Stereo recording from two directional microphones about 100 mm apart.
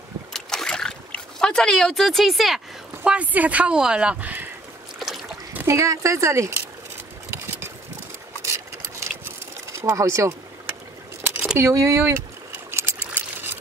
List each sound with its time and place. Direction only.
0.3 s boat: 5° left (ahead or behind)
3.0 s speech: 15° right (ahead or behind)
4.9 s boat: centre (ahead or behind)
5.7 s speech: 30° right (ahead or behind)
8.5 s sewing machine: 25° right (ahead or behind)
11.5 s speech: 30° right (ahead or behind)
12.5 s a sound: 25° right (ahead or behind)